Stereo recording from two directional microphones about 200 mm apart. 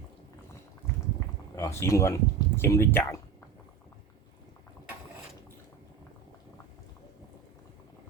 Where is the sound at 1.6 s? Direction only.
15° left (ahead or behind).